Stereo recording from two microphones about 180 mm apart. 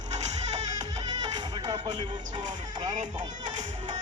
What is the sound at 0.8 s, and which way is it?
Music, 25° right (ahead or behind).